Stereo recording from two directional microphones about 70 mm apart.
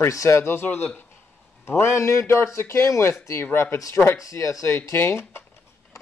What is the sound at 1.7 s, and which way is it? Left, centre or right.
Speech, left.